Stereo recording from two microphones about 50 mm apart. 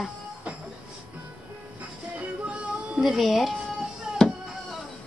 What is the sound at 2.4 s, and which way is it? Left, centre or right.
Music, right.